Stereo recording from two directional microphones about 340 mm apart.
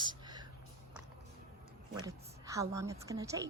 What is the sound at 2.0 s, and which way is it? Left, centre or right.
A woman's voice, centre.